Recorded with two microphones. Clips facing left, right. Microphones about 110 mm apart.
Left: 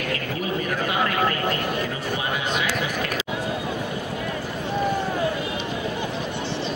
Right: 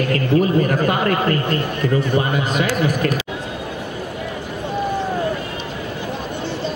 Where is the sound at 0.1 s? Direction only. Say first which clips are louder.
Right 12 dB; 45° right (ahead or behind).